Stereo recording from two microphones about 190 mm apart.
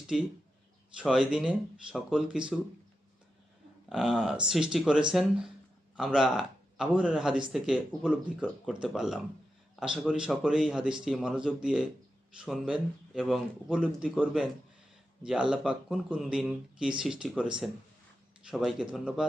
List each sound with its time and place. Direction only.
0.1 s a man's voice: centre (ahead or behind)
3.8 s a man's voice: 5° right (ahead or behind)